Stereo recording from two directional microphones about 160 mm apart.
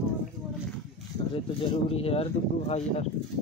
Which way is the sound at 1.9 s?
40° left (ahead or behind).